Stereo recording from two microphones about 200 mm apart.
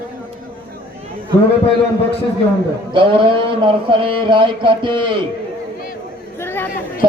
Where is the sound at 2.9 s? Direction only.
25° right (ahead or behind).